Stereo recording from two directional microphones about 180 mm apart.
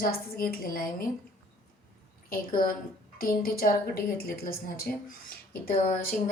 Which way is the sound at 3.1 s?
55° left (ahead or behind).